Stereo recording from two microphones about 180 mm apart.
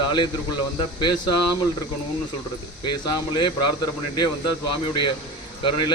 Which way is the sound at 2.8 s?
25° left (ahead or behind).